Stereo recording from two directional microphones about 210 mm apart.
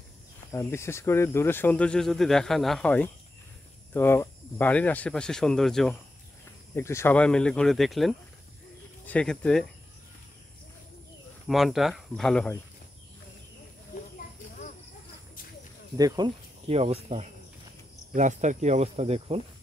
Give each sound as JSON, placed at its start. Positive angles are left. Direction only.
{"t": 0.5, "sound": "speech", "side_deg": 15}
{"t": 6.7, "sound": "speech", "side_deg": 10}
{"t": 11.4, "sound": "speech", "side_deg": 0}
{"t": 16.0, "sound": "speech", "side_deg": -20}